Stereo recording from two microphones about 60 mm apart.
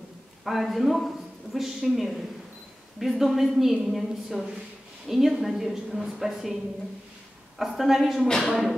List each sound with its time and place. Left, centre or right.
0.5 s a woman's voice: centre